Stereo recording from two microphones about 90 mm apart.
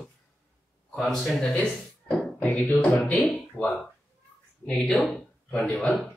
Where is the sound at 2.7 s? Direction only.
5° left (ahead or behind).